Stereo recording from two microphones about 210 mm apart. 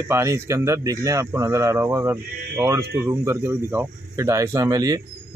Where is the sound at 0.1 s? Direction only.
15° right (ahead or behind).